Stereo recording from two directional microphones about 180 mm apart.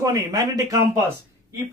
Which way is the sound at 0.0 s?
20° right (ahead or behind).